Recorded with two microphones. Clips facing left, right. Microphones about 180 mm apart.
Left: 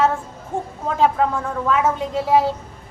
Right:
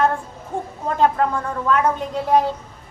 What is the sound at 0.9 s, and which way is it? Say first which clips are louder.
A woman's voice: even; 5° left (ahead or behind).